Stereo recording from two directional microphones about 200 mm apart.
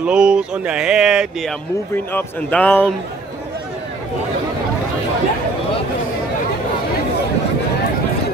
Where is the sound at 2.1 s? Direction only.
10° left (ahead or behind).